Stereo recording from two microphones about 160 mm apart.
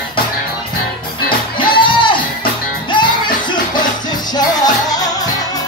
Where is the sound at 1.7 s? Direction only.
30° left (ahead or behind).